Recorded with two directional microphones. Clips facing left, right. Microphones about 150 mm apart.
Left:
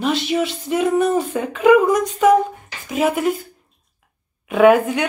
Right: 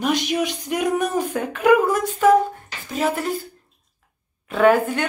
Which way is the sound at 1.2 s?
5° left (ahead or behind).